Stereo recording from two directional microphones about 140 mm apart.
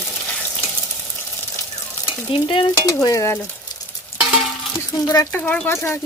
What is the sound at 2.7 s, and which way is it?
Speech, 25° left (ahead or behind).